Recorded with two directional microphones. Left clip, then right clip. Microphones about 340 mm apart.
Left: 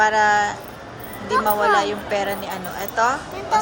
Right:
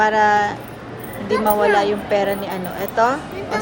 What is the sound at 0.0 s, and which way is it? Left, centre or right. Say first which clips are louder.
A woman's voice: right 1 dB; centre.